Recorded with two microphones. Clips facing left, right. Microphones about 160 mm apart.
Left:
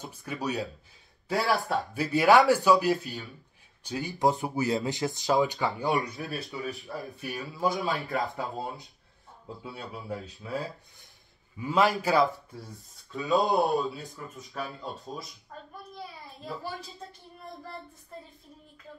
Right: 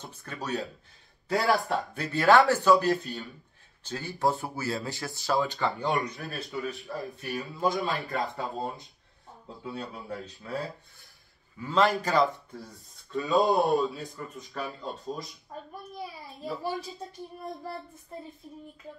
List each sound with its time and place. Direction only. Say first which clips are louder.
0.0 s speech: left 4 dB; 10° left (ahead or behind)
1.3 s speech: right 1 dB; centre (ahead or behind)
2.1 s speech: left 1 dB; 15° left (ahead or behind)
5.7 s a man's voice: left 1 dB; centre (ahead or behind)